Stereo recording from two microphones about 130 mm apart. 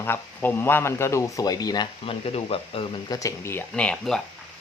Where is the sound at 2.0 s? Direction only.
50° left (ahead or behind).